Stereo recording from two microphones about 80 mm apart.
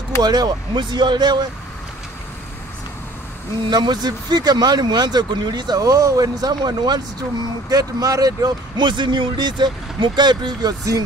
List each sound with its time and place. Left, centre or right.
0.2 s speech: right
3.6 s speech: right